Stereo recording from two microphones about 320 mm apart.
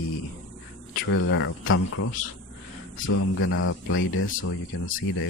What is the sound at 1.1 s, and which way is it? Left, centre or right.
Speech, left.